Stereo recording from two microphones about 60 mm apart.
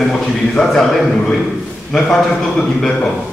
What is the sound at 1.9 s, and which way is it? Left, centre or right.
A man's voice, centre.